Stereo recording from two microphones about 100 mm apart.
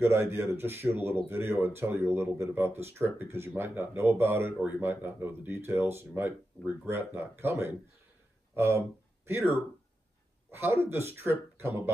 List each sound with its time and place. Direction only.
0.0 s speech: 25° right (ahead or behind)
8.5 s speech: 25° right (ahead or behind)
10.5 s speech: 25° right (ahead or behind)